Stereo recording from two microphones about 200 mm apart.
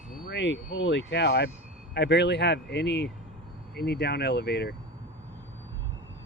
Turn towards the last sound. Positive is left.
turn(degrees=55)  # may be behind; listen again after turning